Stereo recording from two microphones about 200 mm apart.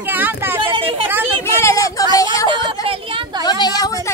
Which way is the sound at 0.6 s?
25° right (ahead or behind).